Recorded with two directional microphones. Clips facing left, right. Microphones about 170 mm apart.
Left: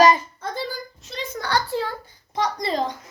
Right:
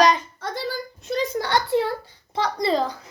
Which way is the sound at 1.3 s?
25° right (ahead or behind).